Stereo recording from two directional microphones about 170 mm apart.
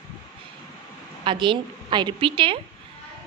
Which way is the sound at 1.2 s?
30° right (ahead or behind).